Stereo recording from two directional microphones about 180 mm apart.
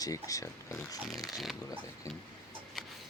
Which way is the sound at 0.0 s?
20° left (ahead or behind).